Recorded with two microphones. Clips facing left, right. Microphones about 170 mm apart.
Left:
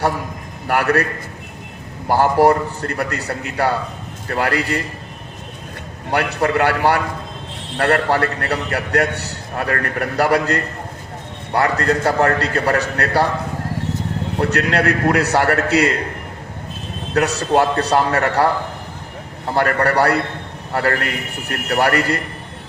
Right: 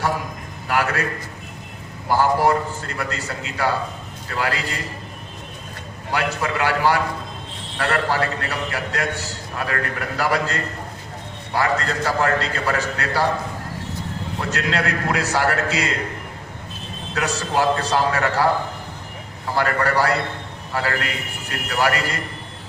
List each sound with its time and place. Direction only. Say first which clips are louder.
0.7 s a man's voice: left 5 dB; 60° left (ahead or behind)
2.0 s a man's voice: left 4 dB; 60° left (ahead or behind)
6.1 s a man's voice: left 5 dB; 60° left (ahead or behind)
14.3 s a man's voice: left 6 dB; 60° left (ahead or behind)
17.2 s a man's voice: left 6 dB; 60° left (ahead or behind)
19.5 s a man's voice: left 4 dB; 60° left (ahead or behind)